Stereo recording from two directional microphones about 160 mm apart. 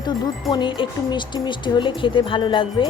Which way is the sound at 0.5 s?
30° left (ahead or behind).